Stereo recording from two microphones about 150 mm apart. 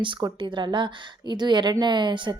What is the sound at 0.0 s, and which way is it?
A woman's voice, 30° right (ahead or behind).